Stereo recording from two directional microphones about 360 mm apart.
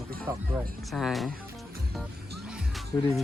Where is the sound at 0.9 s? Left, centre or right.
Centre.